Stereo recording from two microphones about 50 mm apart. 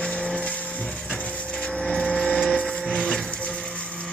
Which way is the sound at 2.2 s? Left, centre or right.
Centre.